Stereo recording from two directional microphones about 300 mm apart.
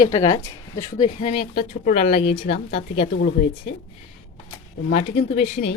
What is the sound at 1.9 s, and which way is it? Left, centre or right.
Speech, centre.